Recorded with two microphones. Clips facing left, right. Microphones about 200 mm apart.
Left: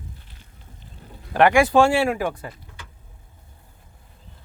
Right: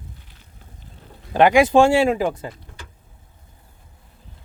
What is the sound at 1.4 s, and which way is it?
Speech, 20° right (ahead or behind).